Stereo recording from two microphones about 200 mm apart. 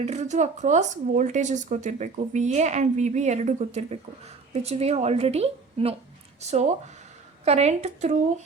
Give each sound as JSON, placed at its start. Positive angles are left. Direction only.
{"t": 0.0, "sound": "speech", "side_deg": -35}